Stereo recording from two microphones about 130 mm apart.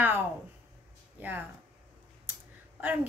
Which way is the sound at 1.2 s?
15° right (ahead or behind).